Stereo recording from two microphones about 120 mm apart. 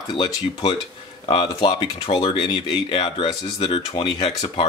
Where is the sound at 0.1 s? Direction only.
40° left (ahead or behind).